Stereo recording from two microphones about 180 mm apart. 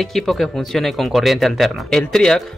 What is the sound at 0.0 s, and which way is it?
Speech, centre (ahead or behind).